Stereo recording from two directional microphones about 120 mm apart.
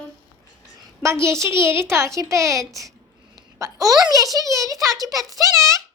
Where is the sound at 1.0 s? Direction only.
20° right (ahead or behind).